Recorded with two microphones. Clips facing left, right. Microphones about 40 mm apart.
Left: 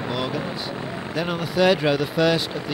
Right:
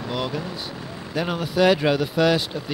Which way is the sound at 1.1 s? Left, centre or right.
Centre.